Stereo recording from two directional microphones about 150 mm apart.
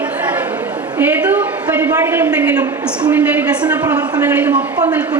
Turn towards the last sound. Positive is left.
turn(degrees=-10)  # may be behind; listen again after turning